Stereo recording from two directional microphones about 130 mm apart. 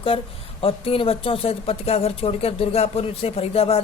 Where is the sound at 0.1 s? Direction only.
45° left (ahead or behind).